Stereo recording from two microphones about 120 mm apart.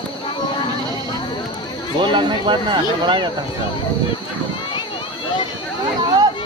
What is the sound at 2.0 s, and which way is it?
Speech, 40° right (ahead or behind).